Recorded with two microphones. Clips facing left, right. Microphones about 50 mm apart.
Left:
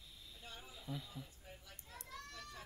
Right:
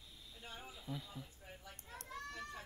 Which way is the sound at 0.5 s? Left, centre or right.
Right.